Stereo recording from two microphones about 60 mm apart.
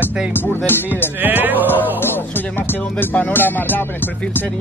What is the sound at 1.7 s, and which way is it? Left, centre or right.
Speech, left.